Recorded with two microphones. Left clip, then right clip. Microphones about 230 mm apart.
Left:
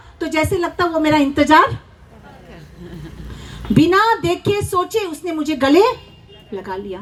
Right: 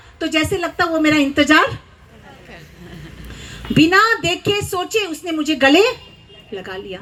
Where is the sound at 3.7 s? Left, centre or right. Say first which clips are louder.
Right 1 dB; left.